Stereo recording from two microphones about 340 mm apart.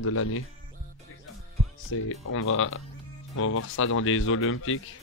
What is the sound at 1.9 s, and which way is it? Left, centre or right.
Speech, left.